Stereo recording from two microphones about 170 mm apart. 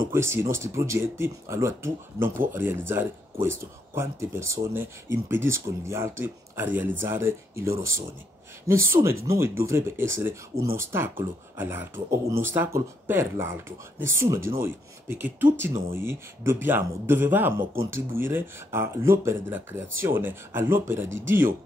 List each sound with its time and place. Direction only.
0.1 s speech: 15° right (ahead or behind)